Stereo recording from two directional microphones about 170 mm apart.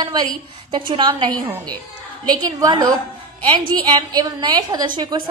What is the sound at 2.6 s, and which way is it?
A woman's voice, 20° right (ahead or behind).